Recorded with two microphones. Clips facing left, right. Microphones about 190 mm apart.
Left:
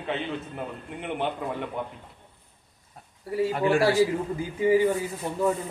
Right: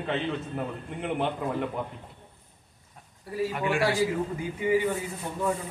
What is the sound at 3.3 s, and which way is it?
A man's voice, 35° left (ahead or behind).